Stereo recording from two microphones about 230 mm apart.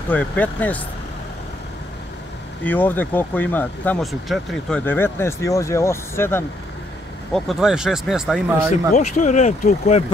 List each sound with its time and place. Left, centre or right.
0.1 s speech: centre
2.6 s speech: centre
7.3 s speech: centre
8.9 s speech: left